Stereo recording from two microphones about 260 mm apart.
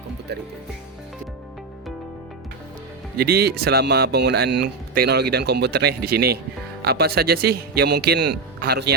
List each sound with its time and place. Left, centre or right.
3.2 s speech: right